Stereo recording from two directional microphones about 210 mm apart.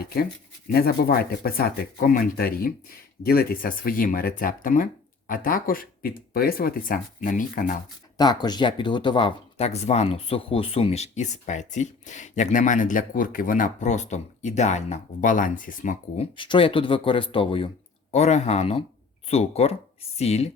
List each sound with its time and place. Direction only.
0.0 s speech: 45° left (ahead or behind)
8.2 s speech: 20° left (ahead or behind)